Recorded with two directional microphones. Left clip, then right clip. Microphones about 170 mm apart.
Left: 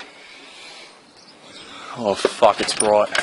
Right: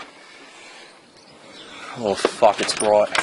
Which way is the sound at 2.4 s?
25° left (ahead or behind).